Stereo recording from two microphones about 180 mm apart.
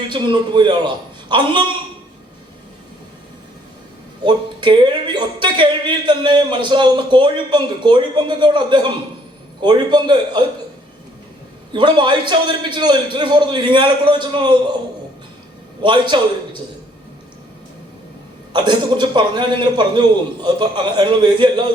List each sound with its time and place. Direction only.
0.1 s speech: 25° right (ahead or behind)
4.2 s speech: 25° right (ahead or behind)
11.7 s speech: 25° right (ahead or behind)
15.8 s speech: 25° right (ahead or behind)
18.5 s speech: 25° right (ahead or behind)